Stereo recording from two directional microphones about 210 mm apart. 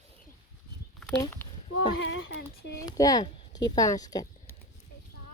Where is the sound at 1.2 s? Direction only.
10° left (ahead or behind).